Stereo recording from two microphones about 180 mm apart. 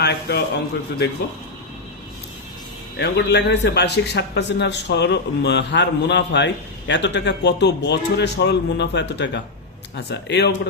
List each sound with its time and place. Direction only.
0.0 s a man's voice: 65° left (ahead or behind)
3.0 s a man's voice: 70° left (ahead or behind)